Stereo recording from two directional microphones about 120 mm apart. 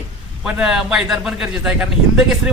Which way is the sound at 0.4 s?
5° right (ahead or behind).